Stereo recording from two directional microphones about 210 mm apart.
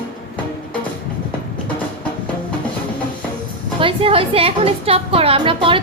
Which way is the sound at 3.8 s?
25° right (ahead or behind).